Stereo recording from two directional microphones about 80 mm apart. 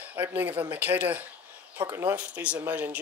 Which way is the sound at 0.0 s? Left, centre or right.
Right.